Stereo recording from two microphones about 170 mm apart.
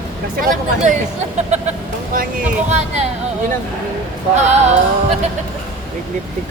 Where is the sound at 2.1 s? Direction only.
55° right (ahead or behind).